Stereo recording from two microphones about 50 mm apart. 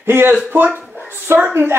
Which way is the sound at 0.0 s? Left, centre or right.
Right.